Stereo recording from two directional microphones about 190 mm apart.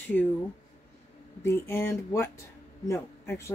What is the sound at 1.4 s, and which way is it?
Speech, 15° left (ahead or behind).